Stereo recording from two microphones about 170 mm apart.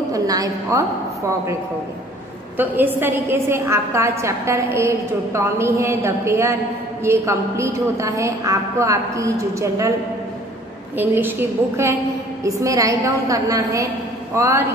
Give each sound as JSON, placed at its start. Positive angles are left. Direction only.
{"t": 0.1, "sound": "a woman's voice", "side_deg": -20}
{"t": 2.5, "sound": "a woman's voice", "side_deg": -10}
{"t": 11.0, "sound": "a woman's voice", "side_deg": -10}